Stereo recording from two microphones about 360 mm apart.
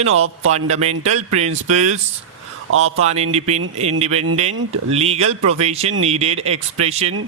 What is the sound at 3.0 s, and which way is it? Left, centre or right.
Speech, centre.